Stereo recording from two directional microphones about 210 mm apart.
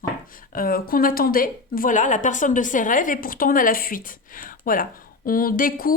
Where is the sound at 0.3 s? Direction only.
40° left (ahead or behind).